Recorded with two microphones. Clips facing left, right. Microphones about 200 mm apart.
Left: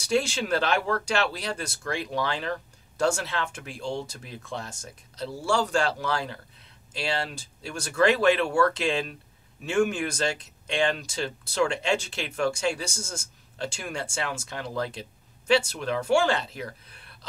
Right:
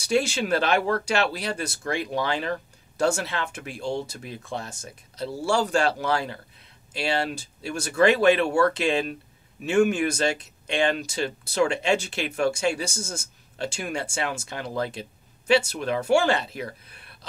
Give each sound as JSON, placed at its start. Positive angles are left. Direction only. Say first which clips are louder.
{"t": 0.2, "sound": "speech", "louder": "right 2 dB", "side_deg": -5}
{"t": 6.9, "sound": "speech", "louder": "right 4 dB", "side_deg": -10}